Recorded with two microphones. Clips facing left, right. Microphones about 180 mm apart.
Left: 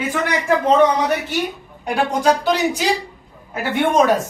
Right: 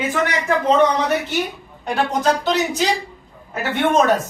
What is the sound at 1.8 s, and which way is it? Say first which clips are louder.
Speech: left 2 dB; 10° left (ahead or behind).